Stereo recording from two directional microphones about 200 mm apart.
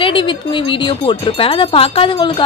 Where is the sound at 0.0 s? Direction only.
25° left (ahead or behind).